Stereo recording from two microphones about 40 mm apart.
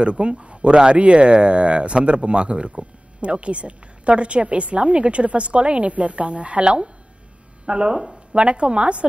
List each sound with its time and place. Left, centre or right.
0.0 s speech: right; by 8.4 s centre
8.4 s speech: right